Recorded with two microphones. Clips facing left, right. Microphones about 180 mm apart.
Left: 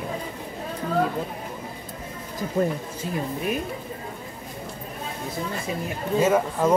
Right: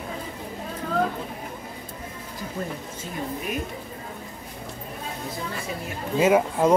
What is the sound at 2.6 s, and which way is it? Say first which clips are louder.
Speech: left 10 dB; 55° left (ahead or behind).